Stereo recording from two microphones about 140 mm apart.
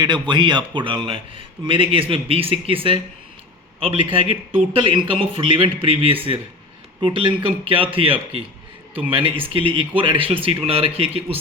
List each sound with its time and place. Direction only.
0.0 s speech: 30° right (ahead or behind)